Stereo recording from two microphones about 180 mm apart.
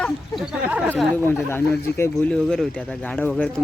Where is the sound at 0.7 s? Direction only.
5° right (ahead or behind).